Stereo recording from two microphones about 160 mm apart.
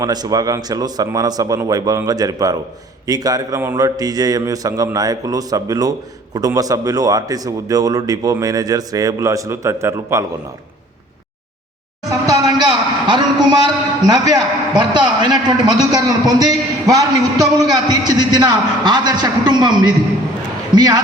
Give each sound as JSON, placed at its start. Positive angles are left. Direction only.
{"t": 0.0, "sound": "a man's voice", "side_deg": -25}
{"t": 12.2, "sound": "a man's voice", "side_deg": -25}